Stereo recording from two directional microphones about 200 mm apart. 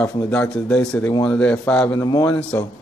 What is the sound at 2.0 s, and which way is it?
Speech, 20° left (ahead or behind).